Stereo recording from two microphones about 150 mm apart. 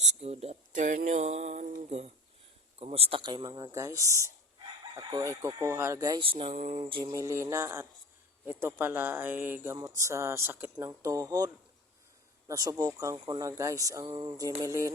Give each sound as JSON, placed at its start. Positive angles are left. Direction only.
{"t": 0.0, "sound": "a sound", "side_deg": -50}
{"t": 2.7, "sound": "speech", "side_deg": -40}
{"t": 6.1, "sound": "speech", "side_deg": -35}
{"t": 6.8, "sound": "speech", "side_deg": -30}